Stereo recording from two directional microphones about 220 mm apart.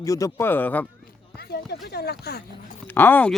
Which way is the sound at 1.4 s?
45° left (ahead or behind).